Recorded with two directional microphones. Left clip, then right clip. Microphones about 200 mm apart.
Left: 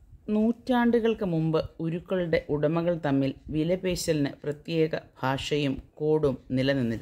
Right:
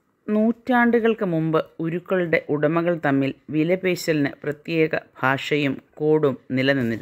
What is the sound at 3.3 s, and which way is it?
Speech, 55° right (ahead or behind).